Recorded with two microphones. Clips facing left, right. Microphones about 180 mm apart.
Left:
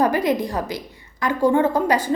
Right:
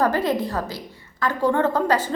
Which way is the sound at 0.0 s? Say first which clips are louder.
Left 2 dB; 15° left (ahead or behind).